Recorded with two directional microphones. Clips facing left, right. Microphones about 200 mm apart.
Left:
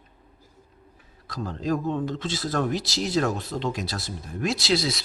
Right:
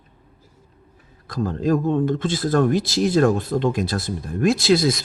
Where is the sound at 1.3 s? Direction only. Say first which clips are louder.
Right 7 dB; 50° right (ahead or behind).